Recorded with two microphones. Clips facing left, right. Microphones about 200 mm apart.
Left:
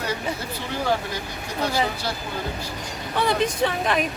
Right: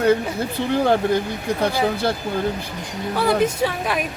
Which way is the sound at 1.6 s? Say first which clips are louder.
Right 4 dB; 55° right (ahead or behind).